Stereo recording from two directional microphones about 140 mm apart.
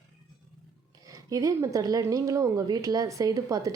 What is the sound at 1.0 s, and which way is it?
A woman's voice, 25° right (ahead or behind).